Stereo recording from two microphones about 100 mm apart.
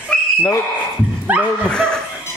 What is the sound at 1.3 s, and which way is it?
Dog, 15° right (ahead or behind).